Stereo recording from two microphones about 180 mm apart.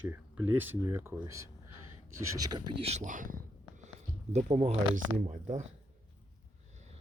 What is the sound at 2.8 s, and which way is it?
Speech, 40° right (ahead or behind).